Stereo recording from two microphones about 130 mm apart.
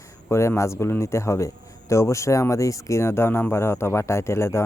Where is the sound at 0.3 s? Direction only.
20° left (ahead or behind).